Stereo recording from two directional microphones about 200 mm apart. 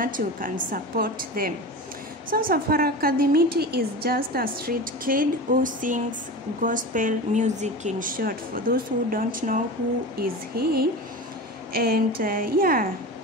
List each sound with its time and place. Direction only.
0.0 s a woman's voice: 45° right (ahead or behind)